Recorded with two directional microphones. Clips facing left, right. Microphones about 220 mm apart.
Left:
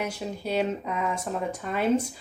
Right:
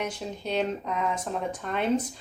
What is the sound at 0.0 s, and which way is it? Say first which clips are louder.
Speech: left 1 dB; 10° left (ahead or behind).